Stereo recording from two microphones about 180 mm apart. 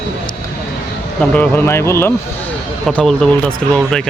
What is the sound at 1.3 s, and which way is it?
Speech, 10° left (ahead or behind).